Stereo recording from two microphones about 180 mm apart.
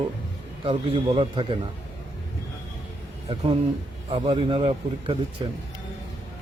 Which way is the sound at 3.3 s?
30° right (ahead or behind).